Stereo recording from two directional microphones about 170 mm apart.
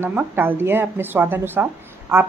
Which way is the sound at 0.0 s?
10° right (ahead or behind).